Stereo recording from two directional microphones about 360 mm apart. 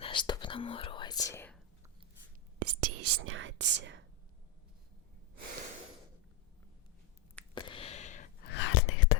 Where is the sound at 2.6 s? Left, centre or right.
Right.